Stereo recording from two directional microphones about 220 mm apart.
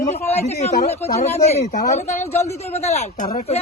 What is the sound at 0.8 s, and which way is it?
Speech, 30° left (ahead or behind).